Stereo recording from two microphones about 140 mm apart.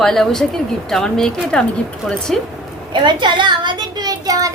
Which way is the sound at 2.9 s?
35° right (ahead or behind).